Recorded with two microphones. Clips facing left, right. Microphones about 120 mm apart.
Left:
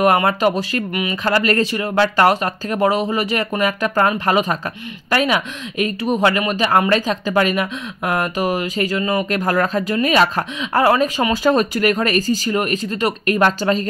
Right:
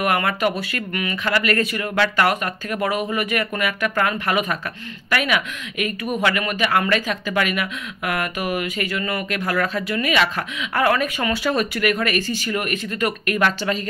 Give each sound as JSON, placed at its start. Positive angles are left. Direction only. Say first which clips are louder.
{"t": 0.0, "sound": "speech", "louder": "left 5 dB", "side_deg": 35}
{"t": 9.3, "sound": "speech", "louder": "left 5 dB", "side_deg": 40}